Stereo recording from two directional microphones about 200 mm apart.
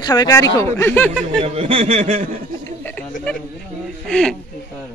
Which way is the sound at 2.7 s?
10° left (ahead or behind).